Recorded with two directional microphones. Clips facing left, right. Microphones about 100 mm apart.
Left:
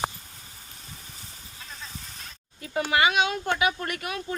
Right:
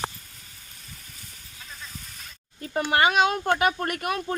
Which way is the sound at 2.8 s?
45° right (ahead or behind).